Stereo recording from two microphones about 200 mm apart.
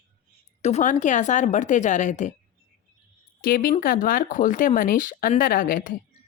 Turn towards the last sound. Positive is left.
turn(degrees=45)  # may be behind; listen again after turning